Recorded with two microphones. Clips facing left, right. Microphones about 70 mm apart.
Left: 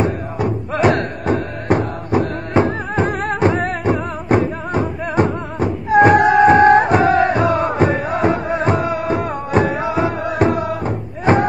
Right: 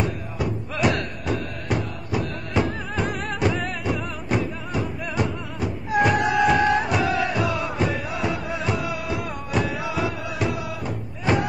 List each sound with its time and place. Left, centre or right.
0.0 s music: left